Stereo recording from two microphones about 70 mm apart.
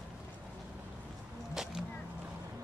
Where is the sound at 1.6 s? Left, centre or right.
Centre.